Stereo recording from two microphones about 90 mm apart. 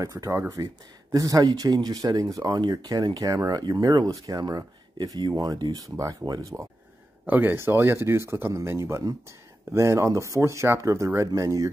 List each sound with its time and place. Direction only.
0.0 s speech: 35° right (ahead or behind)
0.6 s speech: 45° right (ahead or behind)
5.9 s speech: 40° right (ahead or behind)
7.2 s speech: 20° right (ahead or behind); by 11.7 s 40° right (ahead or behind)